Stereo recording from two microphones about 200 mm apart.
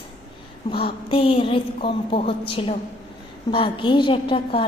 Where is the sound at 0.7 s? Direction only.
25° left (ahead or behind).